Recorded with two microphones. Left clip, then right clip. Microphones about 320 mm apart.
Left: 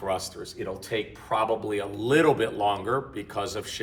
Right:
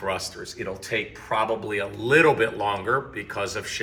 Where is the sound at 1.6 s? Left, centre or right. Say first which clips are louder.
Right 2 dB; centre.